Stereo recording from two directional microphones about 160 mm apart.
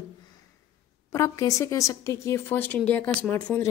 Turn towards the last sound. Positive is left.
turn(degrees=10)  # may be behind; listen again after turning